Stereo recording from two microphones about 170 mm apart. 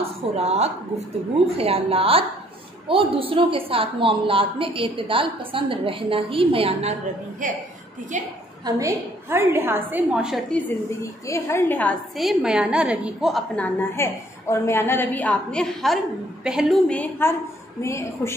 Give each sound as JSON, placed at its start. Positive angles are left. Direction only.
{"t": 0.0, "sound": "a woman's voice", "side_deg": -40}
{"t": 8.6, "sound": "a woman's voice", "side_deg": -20}
{"t": 11.2, "sound": "a woman's voice", "side_deg": 15}
{"t": 13.6, "sound": "a woman's voice", "side_deg": 10}